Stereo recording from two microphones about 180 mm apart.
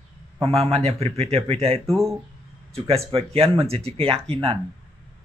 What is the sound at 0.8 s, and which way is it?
Speech, 35° right (ahead or behind).